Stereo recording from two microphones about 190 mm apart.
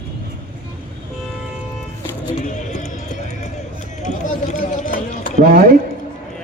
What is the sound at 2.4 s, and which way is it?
Music, 40° left (ahead or behind).